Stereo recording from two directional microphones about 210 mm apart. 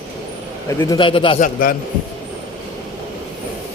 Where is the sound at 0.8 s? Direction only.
20° left (ahead or behind).